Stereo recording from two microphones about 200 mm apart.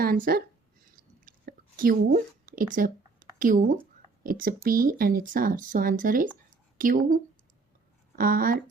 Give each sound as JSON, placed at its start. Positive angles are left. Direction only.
{"t": 0.0, "sound": "speech", "side_deg": -45}
{"t": 0.9, "sound": "whispering", "side_deg": -45}
{"t": 3.3, "sound": "a woman's voice", "side_deg": -40}